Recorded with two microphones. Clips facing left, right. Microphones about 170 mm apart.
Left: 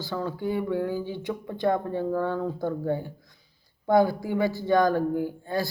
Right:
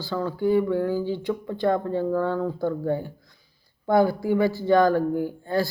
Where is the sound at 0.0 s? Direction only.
20° left (ahead or behind).